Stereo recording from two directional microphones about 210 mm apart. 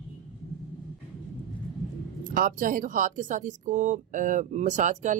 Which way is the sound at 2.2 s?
40° right (ahead or behind).